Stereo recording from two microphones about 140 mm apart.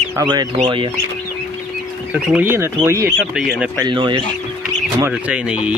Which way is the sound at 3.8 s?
35° right (ahead or behind).